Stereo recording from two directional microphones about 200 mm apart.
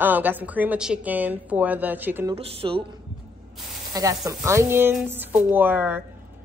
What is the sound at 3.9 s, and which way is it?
A woman's voice, 15° right (ahead or behind).